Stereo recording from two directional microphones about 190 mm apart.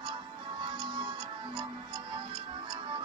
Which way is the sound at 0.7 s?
25° right (ahead or behind).